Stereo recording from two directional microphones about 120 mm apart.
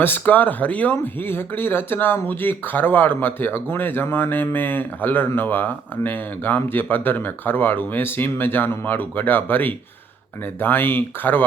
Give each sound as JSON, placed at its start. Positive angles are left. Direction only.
{"t": 0.0, "sound": "speech", "side_deg": 15}